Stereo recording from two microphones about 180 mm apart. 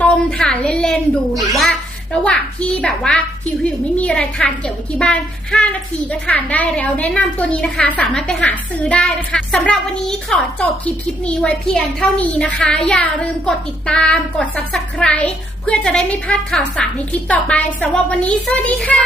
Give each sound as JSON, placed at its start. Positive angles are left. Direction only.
{"t": 0.0, "sound": "a woman's voice", "side_deg": 5}